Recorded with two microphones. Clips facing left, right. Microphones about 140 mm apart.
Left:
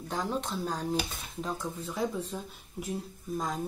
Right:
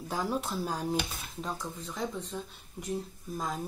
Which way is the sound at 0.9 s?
5° left (ahead or behind).